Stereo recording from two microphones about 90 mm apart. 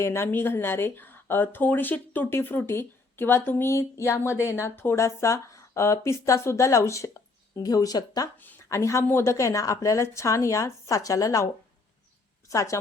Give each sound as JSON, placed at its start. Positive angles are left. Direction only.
{"t": 0.0, "sound": "speech", "side_deg": 30}
{"t": 8.7, "sound": "speech", "side_deg": 35}
{"t": 12.5, "sound": "speech", "side_deg": 35}